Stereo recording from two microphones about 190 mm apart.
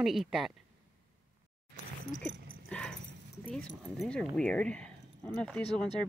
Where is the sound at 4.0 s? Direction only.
5° left (ahead or behind).